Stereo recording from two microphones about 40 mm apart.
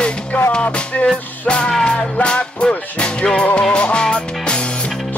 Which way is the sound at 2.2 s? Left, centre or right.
Left.